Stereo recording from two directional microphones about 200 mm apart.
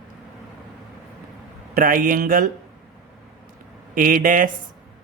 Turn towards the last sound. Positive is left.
turn(degrees=-45)  # may be behind; listen again after turning